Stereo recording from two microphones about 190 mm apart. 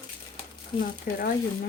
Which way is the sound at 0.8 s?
50° left (ahead or behind).